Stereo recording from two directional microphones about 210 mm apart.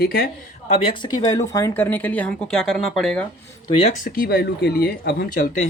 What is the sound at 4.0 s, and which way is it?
Speech, 45° left (ahead or behind).